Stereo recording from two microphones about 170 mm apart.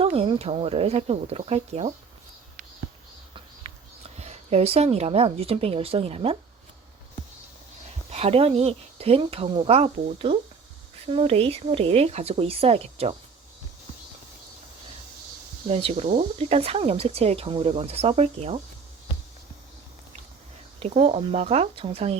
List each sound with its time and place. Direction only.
0.0 s speech: 35° right (ahead or behind)
4.2 s speech: 40° right (ahead or behind)
8.1 s speech: 35° right (ahead or behind)
15.6 s speech: 35° right (ahead or behind)
20.7 s speech: 35° right (ahead or behind)